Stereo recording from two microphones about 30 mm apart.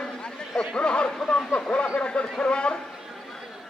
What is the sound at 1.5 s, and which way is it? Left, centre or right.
Vehicle, left.